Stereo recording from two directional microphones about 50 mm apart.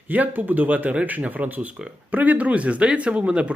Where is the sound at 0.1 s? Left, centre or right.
Right.